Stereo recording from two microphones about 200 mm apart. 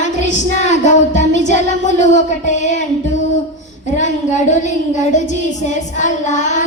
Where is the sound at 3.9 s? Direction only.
35° left (ahead or behind).